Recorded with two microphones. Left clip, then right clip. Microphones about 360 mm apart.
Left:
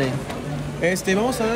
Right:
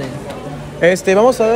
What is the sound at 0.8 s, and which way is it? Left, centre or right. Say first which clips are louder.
Speech: right 10 dB; right.